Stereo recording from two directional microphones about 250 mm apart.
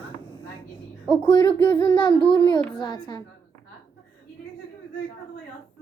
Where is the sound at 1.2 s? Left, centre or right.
Centre.